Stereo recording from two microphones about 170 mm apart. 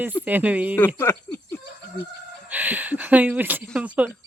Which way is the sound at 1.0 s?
15° left (ahead or behind).